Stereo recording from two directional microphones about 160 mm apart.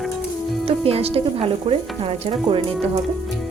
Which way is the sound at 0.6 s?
40° right (ahead or behind).